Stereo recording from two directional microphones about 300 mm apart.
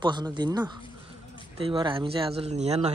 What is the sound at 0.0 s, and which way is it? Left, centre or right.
Speech, centre.